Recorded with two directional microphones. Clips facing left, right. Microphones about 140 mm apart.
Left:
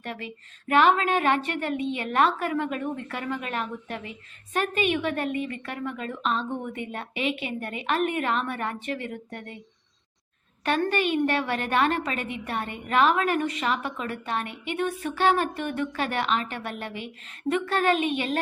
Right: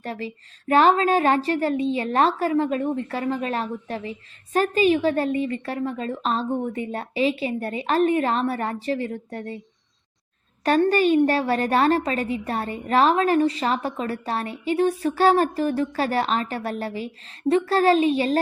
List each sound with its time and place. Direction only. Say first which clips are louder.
0.0 s a woman's voice: right 5 dB; 35° right (ahead or behind)
10.7 s a woman's voice: right 6 dB; 35° right (ahead or behind)